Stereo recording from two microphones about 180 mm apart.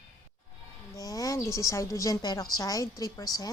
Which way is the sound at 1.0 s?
20° left (ahead or behind).